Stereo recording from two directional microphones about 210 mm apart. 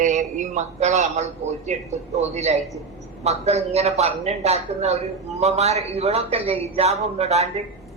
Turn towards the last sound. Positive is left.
turn(degrees=-30)  # may be behind; listen again after turning